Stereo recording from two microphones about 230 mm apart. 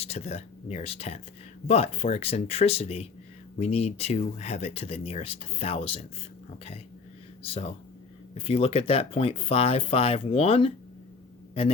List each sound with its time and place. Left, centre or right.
0.0 s speech: left
7.4 s speech: left